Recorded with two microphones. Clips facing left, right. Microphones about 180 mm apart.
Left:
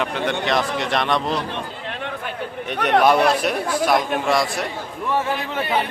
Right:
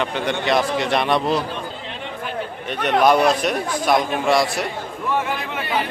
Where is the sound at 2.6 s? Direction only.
10° left (ahead or behind).